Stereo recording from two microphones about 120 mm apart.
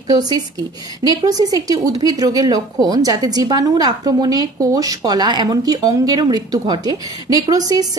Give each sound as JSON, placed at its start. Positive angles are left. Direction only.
{"t": 0.1, "sound": "a woman's voice", "side_deg": -35}